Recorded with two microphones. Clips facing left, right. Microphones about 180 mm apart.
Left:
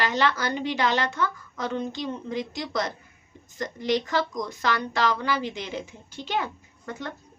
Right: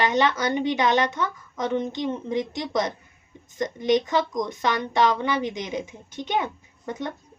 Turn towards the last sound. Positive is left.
turn(degrees=-20)  # may be behind; listen again after turning